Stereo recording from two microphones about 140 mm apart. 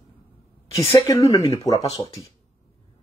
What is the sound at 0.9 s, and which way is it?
Speech, 25° left (ahead or behind).